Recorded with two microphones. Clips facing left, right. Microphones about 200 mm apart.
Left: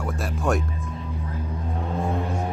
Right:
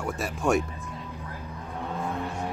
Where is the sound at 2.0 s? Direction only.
30° left (ahead or behind).